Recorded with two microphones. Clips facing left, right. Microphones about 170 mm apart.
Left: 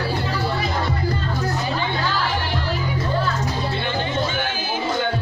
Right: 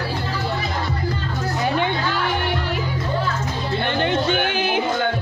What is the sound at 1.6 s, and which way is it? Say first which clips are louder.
Music: right 4 dB; 60° right (ahead or behind).